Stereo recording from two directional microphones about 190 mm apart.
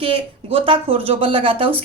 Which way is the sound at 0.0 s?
30° right (ahead or behind).